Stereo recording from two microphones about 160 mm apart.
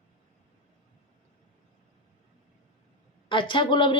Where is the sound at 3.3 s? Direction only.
30° left (ahead or behind).